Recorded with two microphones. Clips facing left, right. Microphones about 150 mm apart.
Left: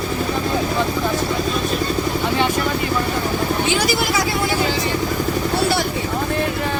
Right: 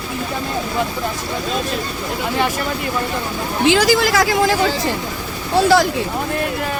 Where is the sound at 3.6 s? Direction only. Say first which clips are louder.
Right 5 dB; 90° right.